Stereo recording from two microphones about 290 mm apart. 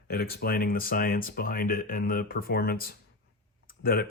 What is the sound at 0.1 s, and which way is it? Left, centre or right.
Speech, left.